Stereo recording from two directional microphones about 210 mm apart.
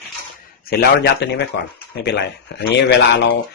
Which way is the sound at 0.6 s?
50° left (ahead or behind).